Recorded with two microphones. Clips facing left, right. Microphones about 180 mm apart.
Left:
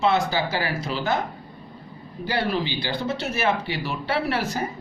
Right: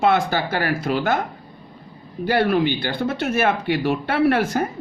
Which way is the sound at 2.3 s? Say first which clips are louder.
Right 7 dB; 55° right (ahead or behind).